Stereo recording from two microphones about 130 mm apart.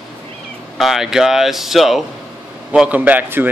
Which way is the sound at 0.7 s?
Centre (ahead or behind).